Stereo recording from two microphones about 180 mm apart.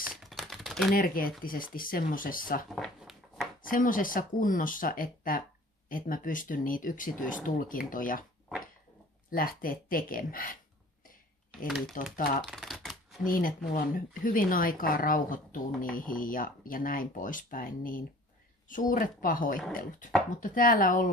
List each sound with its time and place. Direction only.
0.2 s typing: centre (ahead or behind)
0.9 s speech: 55° left (ahead or behind)
2.7 s a sound: centre (ahead or behind)
3.6 s speech: 50° left (ahead or behind)
9.3 s speech: 55° left (ahead or behind)
11.9 s speech: 50° left (ahead or behind)
12.4 s typewriter: centre (ahead or behind)
13.2 s speech: 50° left (ahead or behind)